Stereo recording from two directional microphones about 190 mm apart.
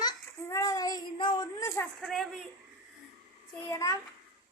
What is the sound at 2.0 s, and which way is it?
Speech, centre (ahead or behind).